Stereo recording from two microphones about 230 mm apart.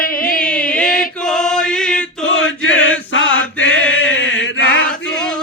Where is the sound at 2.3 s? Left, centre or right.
Left.